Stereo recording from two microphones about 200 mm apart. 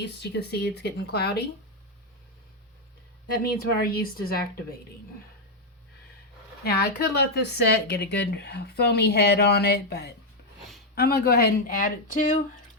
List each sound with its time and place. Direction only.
0.0 s speech: 55° left (ahead or behind)
3.8 s speech: 50° left (ahead or behind)
6.7 s speech: 55° left (ahead or behind)